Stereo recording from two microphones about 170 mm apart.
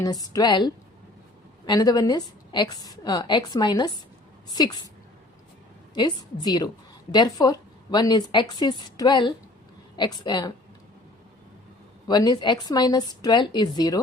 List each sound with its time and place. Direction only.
0.0 s a woman's voice: 20° left (ahead or behind)
5.9 s a woman's voice: 25° left (ahead or behind)
12.0 s a woman's voice: 25° left (ahead or behind)